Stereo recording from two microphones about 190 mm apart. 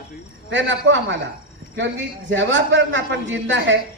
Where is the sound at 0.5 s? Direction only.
70° right (ahead or behind).